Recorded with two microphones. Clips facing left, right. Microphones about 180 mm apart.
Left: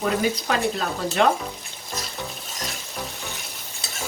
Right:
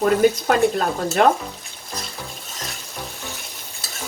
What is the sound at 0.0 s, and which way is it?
A woman's voice, 50° right (ahead or behind).